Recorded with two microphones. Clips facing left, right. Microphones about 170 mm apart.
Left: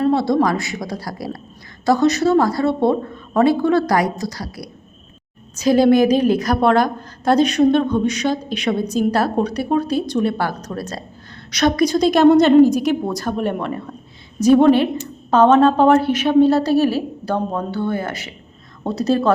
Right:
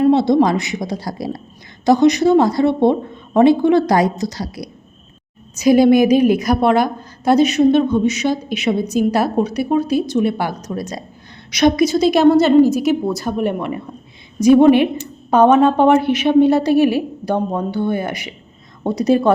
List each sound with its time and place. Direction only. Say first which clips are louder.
0.0 s a woman's voice: right 4 dB; 20° right (ahead or behind)